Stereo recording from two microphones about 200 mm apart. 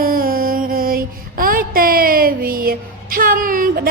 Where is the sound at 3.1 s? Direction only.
45° right (ahead or behind).